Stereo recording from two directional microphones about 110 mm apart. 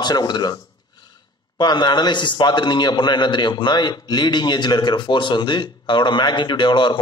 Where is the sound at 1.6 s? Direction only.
40° left (ahead or behind).